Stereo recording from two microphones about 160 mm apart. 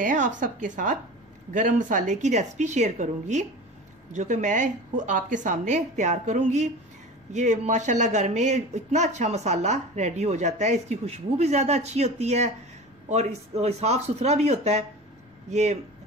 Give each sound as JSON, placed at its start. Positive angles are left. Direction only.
{"t": 0.0, "sound": "a woman's voice", "side_deg": -55}